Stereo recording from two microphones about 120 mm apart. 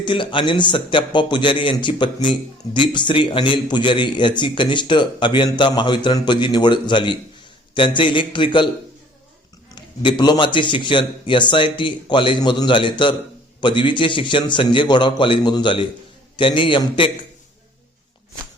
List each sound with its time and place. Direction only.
0.0 s a man's voice: 45° left (ahead or behind)
10.0 s a man's voice: 40° left (ahead or behind)